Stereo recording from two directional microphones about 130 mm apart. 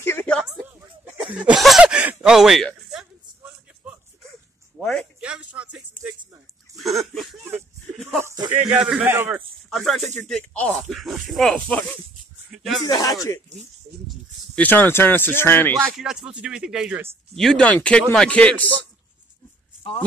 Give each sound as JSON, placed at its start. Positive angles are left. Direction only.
{"t": 0.0, "sound": "a woman's voice", "side_deg": 15}
{"t": 1.2, "sound": "speech", "side_deg": -10}
{"t": 1.6, "sound": "snicker", "side_deg": -5}
{"t": 5.2, "sound": "music", "side_deg": -10}
{"t": 6.8, "sound": "a sound", "side_deg": 0}
{"t": 8.2, "sound": "a sound", "side_deg": -25}
{"t": 8.6, "sound": "a man's voice", "side_deg": -5}
{"t": 9.7, "sound": "snake", "side_deg": 0}
{"t": 10.2, "sound": "speech", "side_deg": 10}
{"t": 12.5, "sound": "a sound", "side_deg": 0}
{"t": 12.8, "sound": "speech", "side_deg": 30}
{"t": 14.5, "sound": "speech", "side_deg": 15}
{"t": 15.9, "sound": "speech", "side_deg": -5}
{"t": 17.4, "sound": "speech", "side_deg": 5}